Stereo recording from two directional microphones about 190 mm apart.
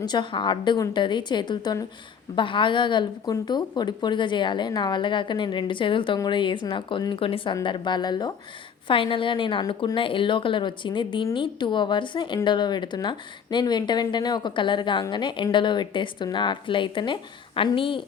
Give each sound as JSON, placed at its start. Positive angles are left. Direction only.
{"t": 0.0, "sound": "a woman's voice", "side_deg": 25}